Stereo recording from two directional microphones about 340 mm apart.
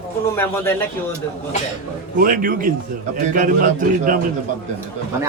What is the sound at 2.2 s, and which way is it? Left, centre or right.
A man's voice, right.